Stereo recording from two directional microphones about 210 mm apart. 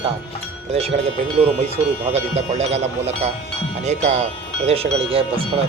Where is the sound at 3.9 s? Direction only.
35° right (ahead or behind).